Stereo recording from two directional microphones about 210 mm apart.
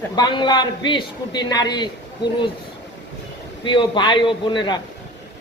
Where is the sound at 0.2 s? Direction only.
20° left (ahead or behind).